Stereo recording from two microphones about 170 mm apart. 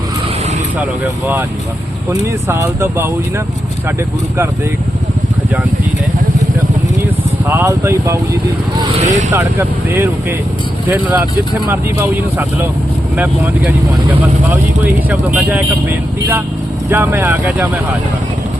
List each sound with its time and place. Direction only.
2.0 s speech: 15° right (ahead or behind)
7.4 s speech: 15° right (ahead or behind)
9.0 s speech: 45° right (ahead or behind)
9.3 s speech: 15° right (ahead or behind)
15.4 s speech: 10° right (ahead or behind)